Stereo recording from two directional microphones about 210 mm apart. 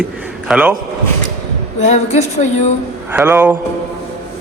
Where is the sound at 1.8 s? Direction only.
35° left (ahead or behind).